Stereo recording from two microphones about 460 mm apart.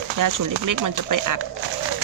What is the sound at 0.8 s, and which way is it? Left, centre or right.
Speech, right.